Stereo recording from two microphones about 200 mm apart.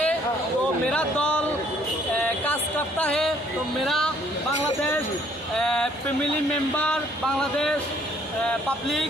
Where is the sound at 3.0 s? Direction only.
5° left (ahead or behind).